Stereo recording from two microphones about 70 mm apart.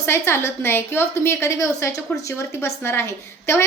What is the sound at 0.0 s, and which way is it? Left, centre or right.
A woman's voice, left.